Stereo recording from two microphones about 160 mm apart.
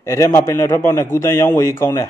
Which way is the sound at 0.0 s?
20° left (ahead or behind).